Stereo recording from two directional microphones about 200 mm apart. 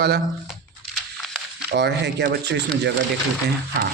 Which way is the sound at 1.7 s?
60° right (ahead or behind).